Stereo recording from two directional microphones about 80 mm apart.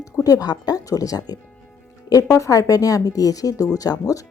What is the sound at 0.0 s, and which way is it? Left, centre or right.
Speech, left.